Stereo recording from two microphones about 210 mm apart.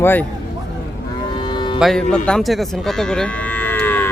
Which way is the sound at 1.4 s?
20° left (ahead or behind).